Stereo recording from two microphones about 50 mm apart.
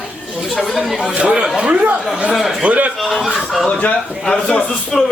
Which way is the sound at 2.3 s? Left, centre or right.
Centre.